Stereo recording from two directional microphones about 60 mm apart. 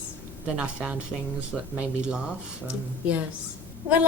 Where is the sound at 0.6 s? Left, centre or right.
Centre.